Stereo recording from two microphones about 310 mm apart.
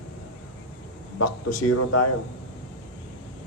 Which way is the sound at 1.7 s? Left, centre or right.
Left.